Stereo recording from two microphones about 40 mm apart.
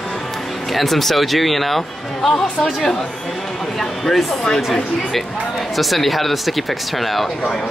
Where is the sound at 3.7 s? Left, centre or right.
Centre.